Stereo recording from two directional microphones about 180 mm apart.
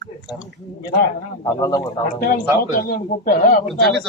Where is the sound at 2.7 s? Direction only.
55° left (ahead or behind).